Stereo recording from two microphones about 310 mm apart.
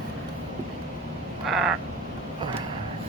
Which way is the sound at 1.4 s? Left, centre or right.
Centre.